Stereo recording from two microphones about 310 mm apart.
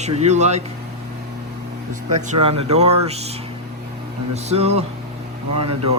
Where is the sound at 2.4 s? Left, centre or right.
Centre.